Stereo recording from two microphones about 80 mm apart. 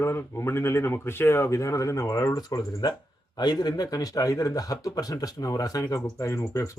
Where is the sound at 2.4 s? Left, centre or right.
Left.